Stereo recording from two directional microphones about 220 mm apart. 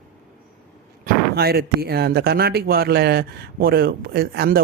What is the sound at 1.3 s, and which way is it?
A man's voice, 45° right (ahead or behind).